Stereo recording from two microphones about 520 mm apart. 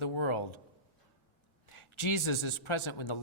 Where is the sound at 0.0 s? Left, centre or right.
Left.